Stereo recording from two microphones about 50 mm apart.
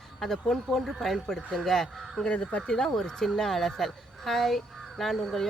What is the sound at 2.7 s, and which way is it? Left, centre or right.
Speech, centre.